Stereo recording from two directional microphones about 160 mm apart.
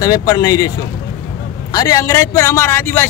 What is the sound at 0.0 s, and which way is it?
A man's voice, 25° left (ahead or behind).